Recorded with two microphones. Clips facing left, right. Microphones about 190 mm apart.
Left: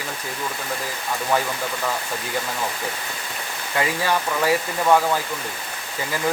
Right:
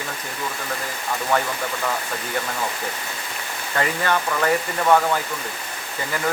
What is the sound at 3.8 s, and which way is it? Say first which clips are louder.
Speech: even; 5° left (ahead or behind).